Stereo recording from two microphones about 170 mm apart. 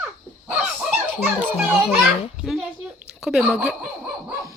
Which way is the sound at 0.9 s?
10° right (ahead or behind).